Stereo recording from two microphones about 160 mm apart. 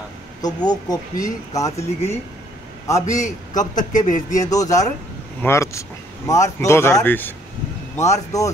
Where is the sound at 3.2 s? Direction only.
50° left (ahead or behind).